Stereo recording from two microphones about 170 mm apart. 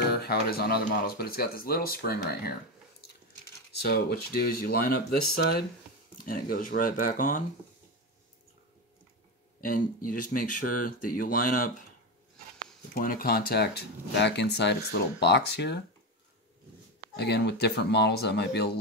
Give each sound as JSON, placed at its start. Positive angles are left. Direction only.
{"t": 0.0, "sound": "speech", "side_deg": 65}
{"t": 3.8, "sound": "speech", "side_deg": 65}
{"t": 9.6, "sound": "speech", "side_deg": 55}
{"t": 12.9, "sound": "speech", "side_deg": 55}
{"t": 17.2, "sound": "speech", "side_deg": 75}